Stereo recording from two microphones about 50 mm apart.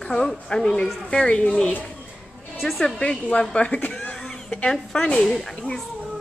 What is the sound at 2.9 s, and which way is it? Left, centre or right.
Speech, left.